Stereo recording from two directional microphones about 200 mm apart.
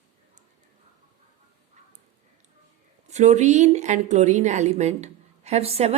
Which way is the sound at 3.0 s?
35° right (ahead or behind).